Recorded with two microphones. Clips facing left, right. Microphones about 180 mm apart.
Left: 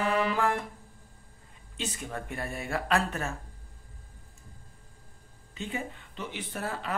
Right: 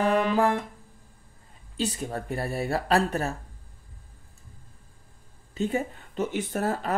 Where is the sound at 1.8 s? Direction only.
35° right (ahead or behind).